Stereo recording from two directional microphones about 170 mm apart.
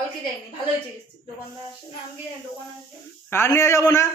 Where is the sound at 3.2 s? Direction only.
15° left (ahead or behind).